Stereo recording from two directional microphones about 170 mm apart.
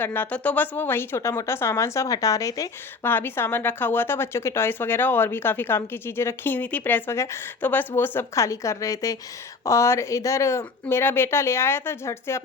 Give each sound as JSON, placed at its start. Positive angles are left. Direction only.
{"t": 0.0, "sound": "speech", "side_deg": 10}